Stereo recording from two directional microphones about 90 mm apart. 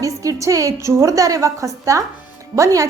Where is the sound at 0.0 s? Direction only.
35° right (ahead or behind).